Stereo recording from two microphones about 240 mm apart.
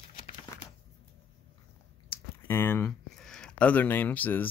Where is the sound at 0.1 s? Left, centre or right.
Left.